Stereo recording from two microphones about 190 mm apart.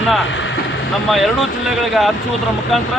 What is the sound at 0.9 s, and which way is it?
A man's voice, centre (ahead or behind).